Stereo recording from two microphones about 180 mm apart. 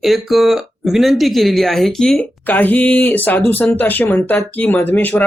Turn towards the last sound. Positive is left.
turn(degrees=10)  # may be behind; listen again after turning